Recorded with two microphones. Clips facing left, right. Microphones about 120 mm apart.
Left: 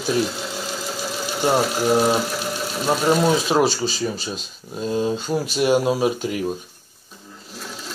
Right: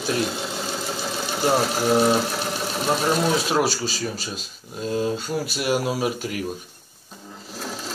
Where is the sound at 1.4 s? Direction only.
15° left (ahead or behind).